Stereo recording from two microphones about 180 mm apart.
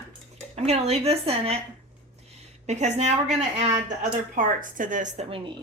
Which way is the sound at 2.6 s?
40° right (ahead or behind).